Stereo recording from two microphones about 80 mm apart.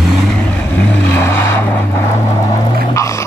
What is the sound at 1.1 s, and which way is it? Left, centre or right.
Vehicle, left.